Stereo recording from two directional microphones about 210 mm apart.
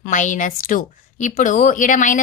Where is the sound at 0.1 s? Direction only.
35° left (ahead or behind).